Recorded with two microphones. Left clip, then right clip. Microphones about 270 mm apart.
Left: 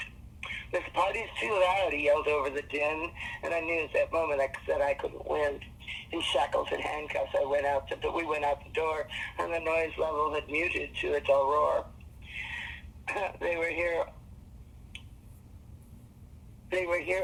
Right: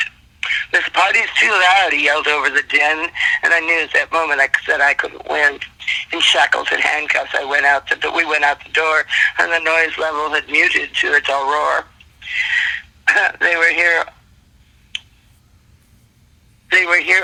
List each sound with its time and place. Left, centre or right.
0.0 s radio: right
2.2 s speech: right
16.7 s speech: right